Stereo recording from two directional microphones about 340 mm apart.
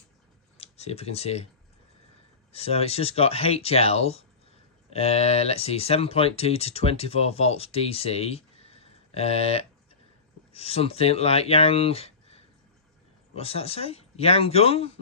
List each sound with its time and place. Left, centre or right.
0.5 s speech: centre
2.5 s speech: centre